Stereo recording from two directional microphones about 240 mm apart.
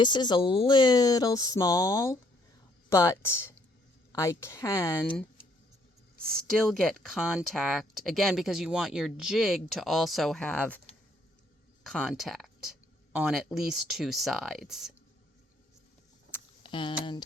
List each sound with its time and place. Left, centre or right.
0.0 s speech: centre
6.2 s speech: centre
11.8 s speech: centre
16.3 s a sound: centre
16.6 s speech: centre